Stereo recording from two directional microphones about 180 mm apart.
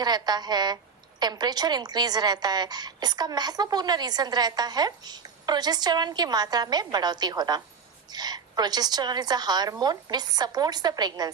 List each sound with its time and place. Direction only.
0.0 s a woman's voice: 25° right (ahead or behind)